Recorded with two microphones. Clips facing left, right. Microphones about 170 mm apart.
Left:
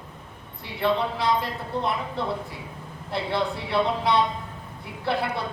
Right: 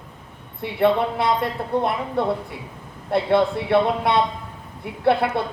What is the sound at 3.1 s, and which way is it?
A woman's voice, 55° right (ahead or behind).